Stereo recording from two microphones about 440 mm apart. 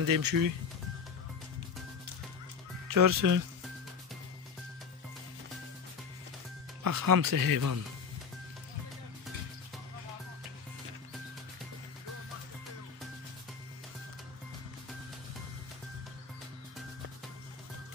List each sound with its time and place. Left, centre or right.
0.0 s speech: right
2.9 s speech: right
6.8 s speech: right